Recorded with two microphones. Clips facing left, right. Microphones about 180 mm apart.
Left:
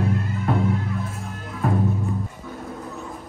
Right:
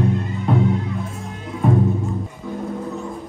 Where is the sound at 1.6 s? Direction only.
Centre (ahead or behind).